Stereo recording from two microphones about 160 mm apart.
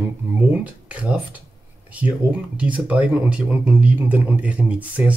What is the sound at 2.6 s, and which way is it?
Speech, 10° right (ahead or behind).